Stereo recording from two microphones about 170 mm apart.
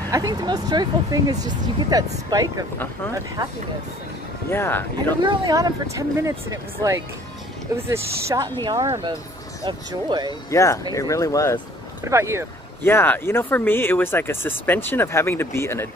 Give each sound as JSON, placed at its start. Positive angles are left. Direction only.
{"t": 0.1, "sound": "speech", "side_deg": -20}
{"t": 4.5, "sound": "speech", "side_deg": 15}
{"t": 5.2, "sound": "speech", "side_deg": -25}
{"t": 10.5, "sound": "speech", "side_deg": 20}
{"t": 12.0, "sound": "speech", "side_deg": -15}
{"t": 12.8, "sound": "speech", "side_deg": 10}